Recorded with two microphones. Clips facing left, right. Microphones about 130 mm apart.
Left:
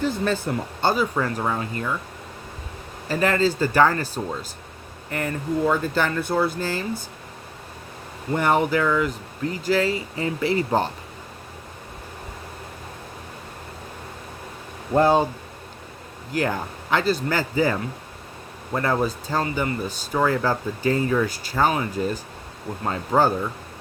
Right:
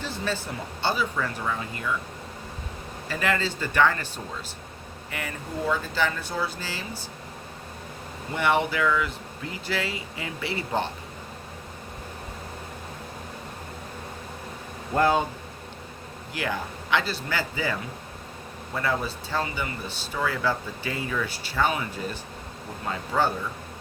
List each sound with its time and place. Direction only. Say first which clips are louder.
0.0 s speech: left 7 dB; 50° left (ahead or behind)
3.1 s speech: left 6 dB; 40° left (ahead or behind)
5.1 s speech: left 8 dB; 50° left (ahead or behind)
8.3 s speech: left 4 dB; 40° left (ahead or behind)
14.9 s speech: left 4 dB; 30° left (ahead or behind)
16.3 s speech: left 6 dB; 45° left (ahead or behind)